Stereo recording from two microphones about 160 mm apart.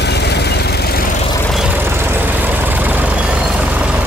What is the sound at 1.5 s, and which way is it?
Vehicle, 5° right (ahead or behind).